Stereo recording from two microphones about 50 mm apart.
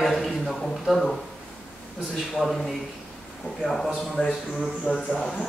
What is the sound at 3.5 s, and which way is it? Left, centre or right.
Speech, left.